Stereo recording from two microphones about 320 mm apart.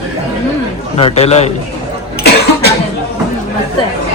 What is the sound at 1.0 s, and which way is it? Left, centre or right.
Speech, centre.